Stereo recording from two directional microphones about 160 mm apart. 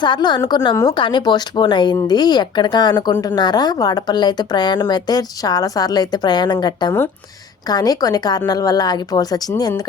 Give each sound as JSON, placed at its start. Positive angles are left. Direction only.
{"t": 0.0, "sound": "a woman's voice", "side_deg": 30}